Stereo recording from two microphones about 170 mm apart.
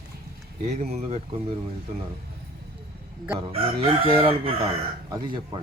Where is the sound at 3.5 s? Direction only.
35° right (ahead or behind).